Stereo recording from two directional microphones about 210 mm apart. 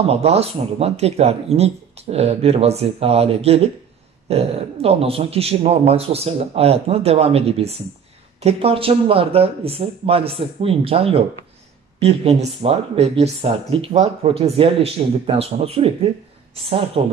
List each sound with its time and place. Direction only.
0.0 s speech: 30° right (ahead or behind)